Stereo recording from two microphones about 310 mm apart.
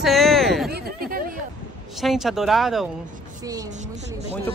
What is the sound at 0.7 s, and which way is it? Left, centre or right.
Chatter, right.